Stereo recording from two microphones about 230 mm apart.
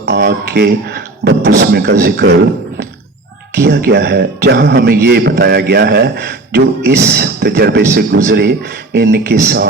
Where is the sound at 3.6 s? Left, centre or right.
Right.